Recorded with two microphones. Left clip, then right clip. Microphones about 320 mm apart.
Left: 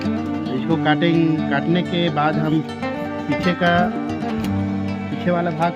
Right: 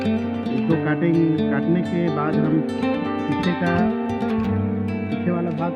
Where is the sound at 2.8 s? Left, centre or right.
Left.